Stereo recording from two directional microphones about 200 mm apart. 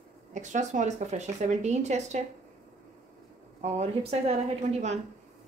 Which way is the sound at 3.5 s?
35° right (ahead or behind).